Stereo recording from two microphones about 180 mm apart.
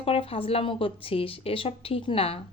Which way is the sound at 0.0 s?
30° left (ahead or behind).